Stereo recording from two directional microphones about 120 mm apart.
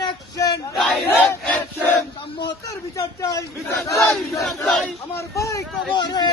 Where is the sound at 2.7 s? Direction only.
30° left (ahead or behind).